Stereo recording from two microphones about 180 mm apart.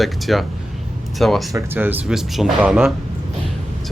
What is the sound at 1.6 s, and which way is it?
Speech, 10° right (ahead or behind).